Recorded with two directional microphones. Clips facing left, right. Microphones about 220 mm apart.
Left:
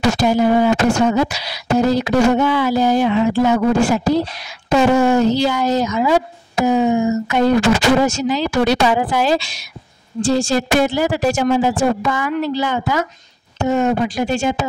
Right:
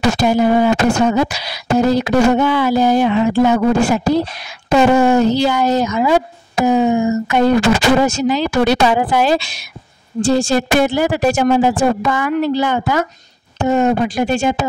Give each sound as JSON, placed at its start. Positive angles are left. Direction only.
{"t": 0.2, "sound": "speech", "side_deg": -60}